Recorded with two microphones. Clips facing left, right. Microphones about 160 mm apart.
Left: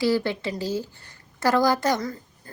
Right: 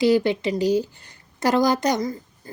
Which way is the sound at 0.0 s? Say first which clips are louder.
Right 5 dB; 20° right (ahead or behind).